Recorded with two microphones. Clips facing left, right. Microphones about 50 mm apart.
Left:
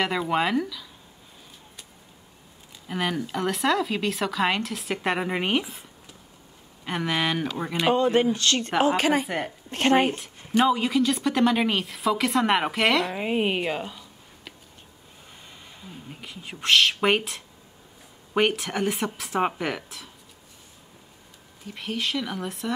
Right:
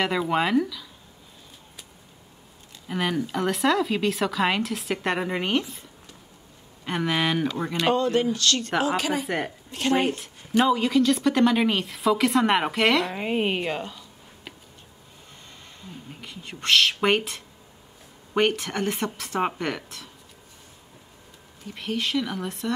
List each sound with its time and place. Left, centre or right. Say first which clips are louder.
0.0 s a woman's voice: right 1 dB; centre
2.9 s a woman's voice: right 1 dB; centre
7.7 s speech: left 2 dB; centre
8.8 s a woman's voice: left 7 dB; left
9.2 s a woman's voice: right 1 dB; centre
9.7 s speech: left 4 dB; left
10.1 s a woman's voice: right 1 dB; centre
15.8 s a woman's voice: even; centre
21.6 s a woman's voice: right 1 dB; centre